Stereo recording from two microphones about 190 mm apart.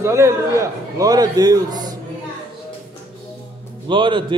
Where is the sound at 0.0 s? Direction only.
15° right (ahead or behind).